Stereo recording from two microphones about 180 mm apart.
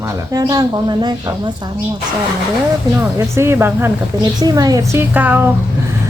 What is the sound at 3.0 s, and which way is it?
A woman's voice, 15° right (ahead or behind).